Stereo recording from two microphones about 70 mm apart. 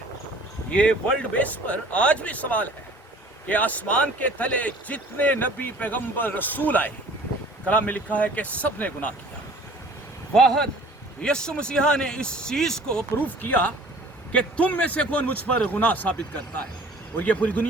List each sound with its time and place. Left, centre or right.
0.7 s speech: centre
10.3 s speech: centre
13.1 s speech: left